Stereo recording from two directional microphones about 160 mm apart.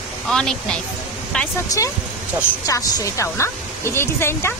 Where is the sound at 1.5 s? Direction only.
20° left (ahead or behind).